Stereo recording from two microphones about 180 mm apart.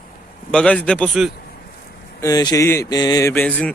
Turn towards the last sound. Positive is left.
turn(degrees=10)  # may be behind; listen again after turning